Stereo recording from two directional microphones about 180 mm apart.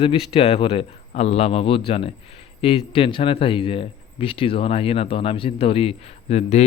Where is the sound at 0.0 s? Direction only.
30° left (ahead or behind).